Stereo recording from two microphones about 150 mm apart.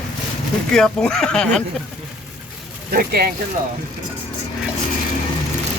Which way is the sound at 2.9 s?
90° right.